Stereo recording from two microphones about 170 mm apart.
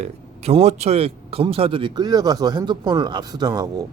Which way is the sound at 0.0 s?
40° right (ahead or behind).